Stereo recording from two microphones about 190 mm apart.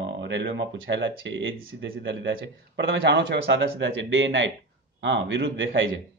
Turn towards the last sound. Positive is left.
turn(degrees=-85)